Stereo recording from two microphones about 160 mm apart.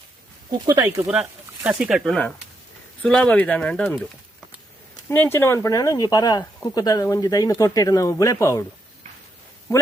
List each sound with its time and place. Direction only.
0.6 s speech: 20° right (ahead or behind)
1.0 s speech: 5° right (ahead or behind)
5.0 s speech: 10° left (ahead or behind)
9.7 s a man's voice: 20° left (ahead or behind)